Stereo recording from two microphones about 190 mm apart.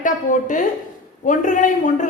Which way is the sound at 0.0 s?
40° left (ahead or behind).